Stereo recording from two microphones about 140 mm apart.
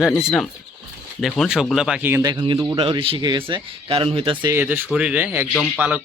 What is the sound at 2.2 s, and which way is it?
Speech, 30° right (ahead or behind).